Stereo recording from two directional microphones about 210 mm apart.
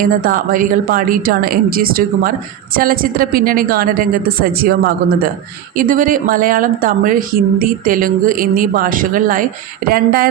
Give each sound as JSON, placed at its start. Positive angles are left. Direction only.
{"t": 0.0, "sound": "speech", "side_deg": -40}
{"t": 5.7, "sound": "speech", "side_deg": -40}